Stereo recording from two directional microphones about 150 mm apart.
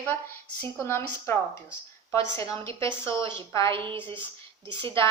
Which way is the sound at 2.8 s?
20° left (ahead or behind).